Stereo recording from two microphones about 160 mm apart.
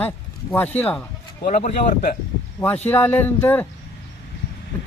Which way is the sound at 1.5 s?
50° left (ahead or behind).